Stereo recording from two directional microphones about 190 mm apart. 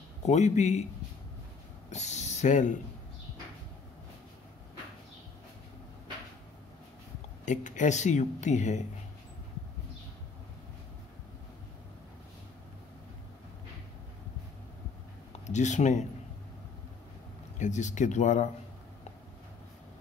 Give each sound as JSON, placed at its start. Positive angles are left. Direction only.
{"t": 0.2, "sound": "speech", "side_deg": 35}
{"t": 1.9, "sound": "a sound", "side_deg": 35}
{"t": 7.4, "sound": "speech", "side_deg": 40}
{"t": 15.4, "sound": "speech", "side_deg": 40}
{"t": 17.6, "sound": "speech", "side_deg": 40}